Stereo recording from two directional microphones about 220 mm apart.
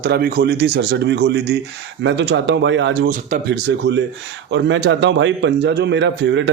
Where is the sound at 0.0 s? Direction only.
45° right (ahead or behind).